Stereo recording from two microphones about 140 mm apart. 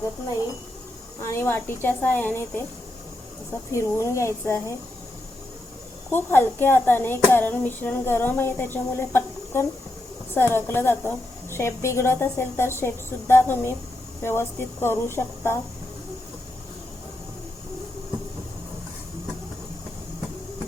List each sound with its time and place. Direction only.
1.2 s speech: 20° left (ahead or behind)
3.7 s speech: 20° left (ahead or behind)
6.1 s speech: 15° left (ahead or behind)